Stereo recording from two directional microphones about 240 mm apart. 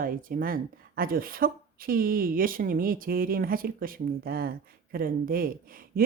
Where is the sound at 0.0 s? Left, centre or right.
Right.